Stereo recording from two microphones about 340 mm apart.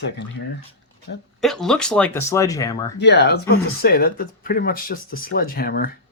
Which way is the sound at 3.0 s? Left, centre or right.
Left.